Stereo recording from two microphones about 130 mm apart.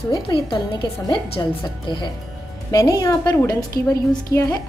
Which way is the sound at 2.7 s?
25° left (ahead or behind).